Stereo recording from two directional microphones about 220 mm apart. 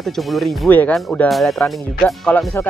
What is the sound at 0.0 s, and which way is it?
Speech, centre (ahead or behind).